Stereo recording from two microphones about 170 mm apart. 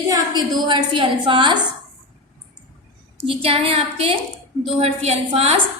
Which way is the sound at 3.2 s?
35° right (ahead or behind).